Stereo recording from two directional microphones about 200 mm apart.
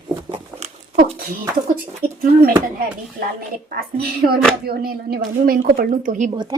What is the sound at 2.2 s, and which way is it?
Speech, 45° right (ahead or behind).